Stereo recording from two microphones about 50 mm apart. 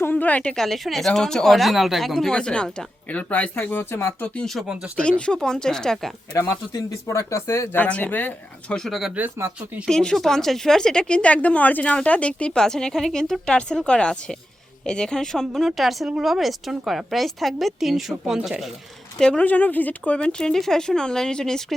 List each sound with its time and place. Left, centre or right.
0.1 s a woman's voice: left
0.5 s a woman's voice: centre
1.5 s a woman's voice: centre
2.3 s a woman's voice: centre
3.7 s speech: left
4.9 s a woman's voice: left
7.1 s speech: left
7.8 s speech: left
8.7 s a woman's voice: centre
19.4 s speech: left
20.5 s a woman's voice: centre